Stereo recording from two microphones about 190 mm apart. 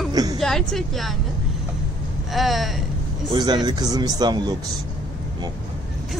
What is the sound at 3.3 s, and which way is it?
Speech, 20° right (ahead or behind).